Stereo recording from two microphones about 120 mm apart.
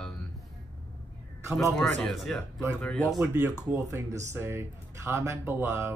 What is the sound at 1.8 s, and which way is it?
Speech, 5° left (ahead or behind).